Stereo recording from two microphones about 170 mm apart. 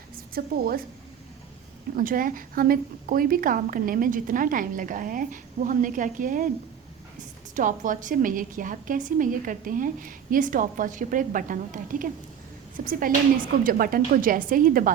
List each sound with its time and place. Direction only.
0.3 s a woman's voice: 60° right (ahead or behind)
2.0 s a woman's voice: 55° right (ahead or behind)
7.5 s a woman's voice: 50° right (ahead or behind)